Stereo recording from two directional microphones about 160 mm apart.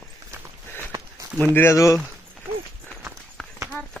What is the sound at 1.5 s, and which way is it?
Speech, 15° left (ahead or behind).